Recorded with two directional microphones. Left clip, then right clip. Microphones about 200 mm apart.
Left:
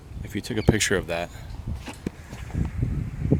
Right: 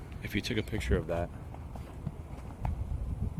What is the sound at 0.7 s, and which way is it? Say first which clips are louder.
Speech: left 10 dB; 45° left (ahead or behind).